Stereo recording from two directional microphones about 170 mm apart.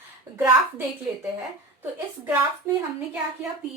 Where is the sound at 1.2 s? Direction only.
10° right (ahead or behind).